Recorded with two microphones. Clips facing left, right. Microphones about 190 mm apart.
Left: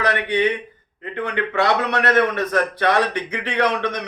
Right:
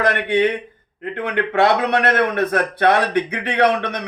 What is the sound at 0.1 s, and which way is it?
A man's voice, 55° right (ahead or behind).